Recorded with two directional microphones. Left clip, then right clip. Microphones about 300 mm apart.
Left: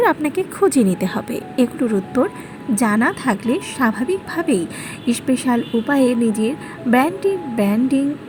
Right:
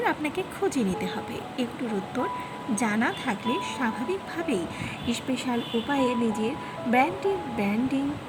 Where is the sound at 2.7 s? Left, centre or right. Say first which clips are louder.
Left 9 dB; centre.